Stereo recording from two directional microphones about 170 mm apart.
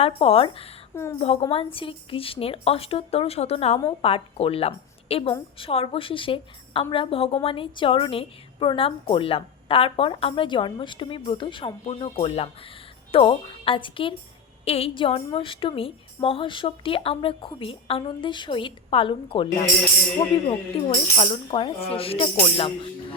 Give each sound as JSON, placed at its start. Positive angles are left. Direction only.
{"t": 0.0, "sound": "a woman's voice", "side_deg": 35}
{"t": 20.5, "sound": "a woman's voice", "side_deg": 35}